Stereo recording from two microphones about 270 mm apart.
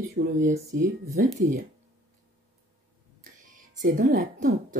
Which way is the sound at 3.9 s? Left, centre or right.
Right.